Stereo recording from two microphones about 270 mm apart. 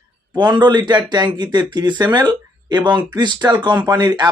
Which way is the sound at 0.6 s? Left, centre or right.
Centre.